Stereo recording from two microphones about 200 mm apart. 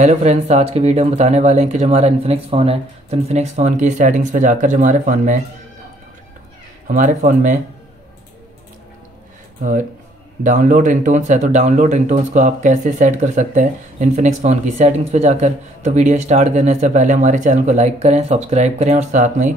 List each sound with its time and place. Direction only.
0.0 s speech: 35° right (ahead or behind)
6.9 s speech: 40° right (ahead or behind)
9.6 s speech: 40° right (ahead or behind)